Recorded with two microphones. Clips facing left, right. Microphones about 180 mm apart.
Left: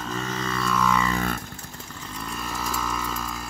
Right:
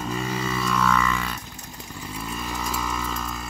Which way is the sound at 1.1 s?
50° left (ahead or behind).